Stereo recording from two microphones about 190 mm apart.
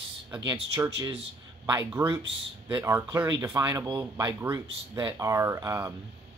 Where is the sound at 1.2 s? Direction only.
20° right (ahead or behind).